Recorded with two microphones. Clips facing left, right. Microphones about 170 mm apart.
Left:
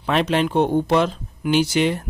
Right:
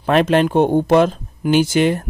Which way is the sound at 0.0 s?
50° right (ahead or behind).